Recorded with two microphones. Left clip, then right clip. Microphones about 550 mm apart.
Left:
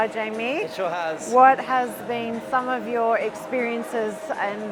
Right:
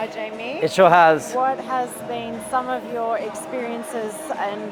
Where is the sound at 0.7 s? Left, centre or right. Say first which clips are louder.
Right 13 dB; right.